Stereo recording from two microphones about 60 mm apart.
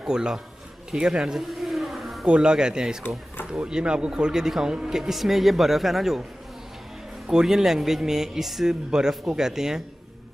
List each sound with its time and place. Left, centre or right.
0.0 s speech: centre
1.5 s a sound: centre
2.2 s speech: centre
7.2 s speech: centre